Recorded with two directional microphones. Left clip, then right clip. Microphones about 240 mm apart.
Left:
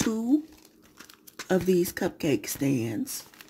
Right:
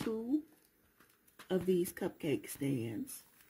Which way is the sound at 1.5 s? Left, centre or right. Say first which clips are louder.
Left 9 dB; centre.